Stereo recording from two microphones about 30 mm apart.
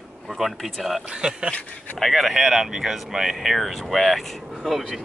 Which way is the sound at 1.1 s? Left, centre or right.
Right.